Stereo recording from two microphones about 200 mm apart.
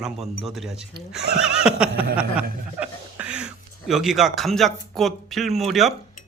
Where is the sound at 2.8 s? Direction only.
5° right (ahead or behind).